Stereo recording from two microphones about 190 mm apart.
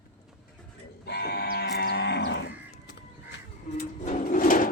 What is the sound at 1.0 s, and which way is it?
Moo, 60° left (ahead or behind).